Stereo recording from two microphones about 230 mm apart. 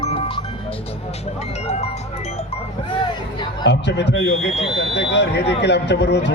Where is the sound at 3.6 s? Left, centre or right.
Left.